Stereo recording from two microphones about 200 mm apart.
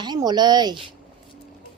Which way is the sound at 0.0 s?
20° right (ahead or behind).